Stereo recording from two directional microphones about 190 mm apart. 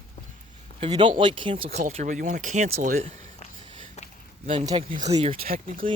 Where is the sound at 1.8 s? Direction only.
40° right (ahead or behind).